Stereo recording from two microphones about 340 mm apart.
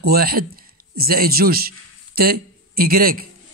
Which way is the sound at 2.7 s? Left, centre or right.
Right.